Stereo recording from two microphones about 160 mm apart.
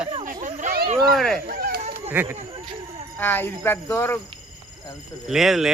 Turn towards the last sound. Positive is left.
turn(degrees=0)  # may be behind; listen again after turning